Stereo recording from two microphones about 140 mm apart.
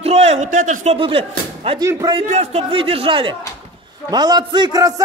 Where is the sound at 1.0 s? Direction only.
40° right (ahead or behind).